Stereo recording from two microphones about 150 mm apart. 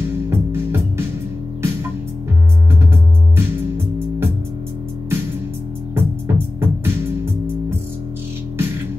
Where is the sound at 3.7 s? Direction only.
15° right (ahead or behind).